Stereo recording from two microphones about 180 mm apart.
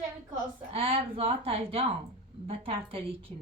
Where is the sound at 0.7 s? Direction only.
30° right (ahead or behind).